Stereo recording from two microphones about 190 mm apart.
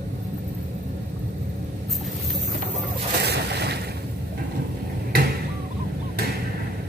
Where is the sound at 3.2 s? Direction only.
60° right (ahead or behind).